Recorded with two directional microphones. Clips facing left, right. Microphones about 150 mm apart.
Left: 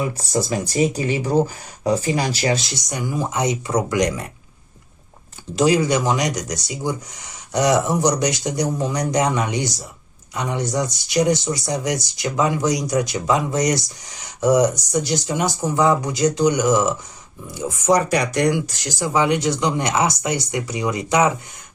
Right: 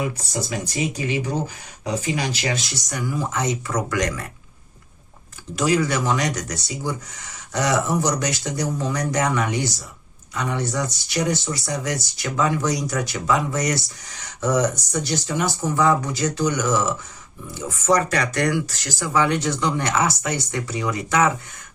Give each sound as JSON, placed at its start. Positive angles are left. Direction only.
{"t": 0.5, "sound": "speech", "side_deg": 35}
{"t": 2.9, "sound": "speech", "side_deg": 20}
{"t": 5.5, "sound": "speech", "side_deg": 25}